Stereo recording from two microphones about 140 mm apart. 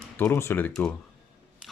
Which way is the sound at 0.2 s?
15° left (ahead or behind).